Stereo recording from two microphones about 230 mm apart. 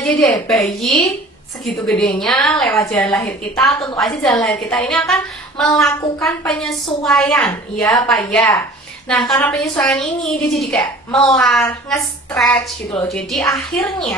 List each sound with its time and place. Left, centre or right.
0.0 s a woman's voice: centre